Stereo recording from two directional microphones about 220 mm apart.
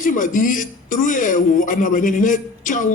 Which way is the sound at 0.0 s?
35° left (ahead or behind).